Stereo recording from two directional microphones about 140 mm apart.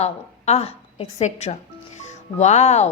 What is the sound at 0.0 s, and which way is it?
Speech, 50° left (ahead or behind).